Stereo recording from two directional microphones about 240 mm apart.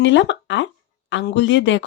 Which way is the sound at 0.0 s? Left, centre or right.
Left.